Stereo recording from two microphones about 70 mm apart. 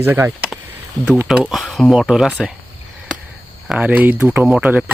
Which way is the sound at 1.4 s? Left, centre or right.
Centre.